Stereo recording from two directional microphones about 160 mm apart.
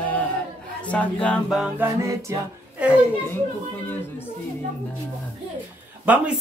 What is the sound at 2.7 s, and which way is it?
Speech, 5° right (ahead or behind).